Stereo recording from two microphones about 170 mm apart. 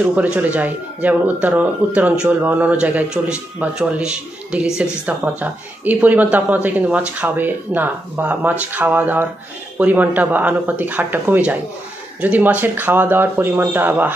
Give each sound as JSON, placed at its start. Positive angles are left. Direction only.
{"t": 0.0, "sound": "speech", "side_deg": -10}